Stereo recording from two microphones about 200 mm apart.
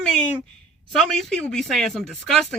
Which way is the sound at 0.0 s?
5° left (ahead or behind).